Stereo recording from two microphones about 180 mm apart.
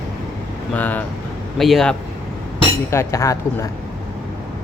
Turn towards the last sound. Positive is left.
turn(degrees=15)  # may be behind; listen again after turning